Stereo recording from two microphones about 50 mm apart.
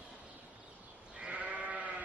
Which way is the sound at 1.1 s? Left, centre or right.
Right.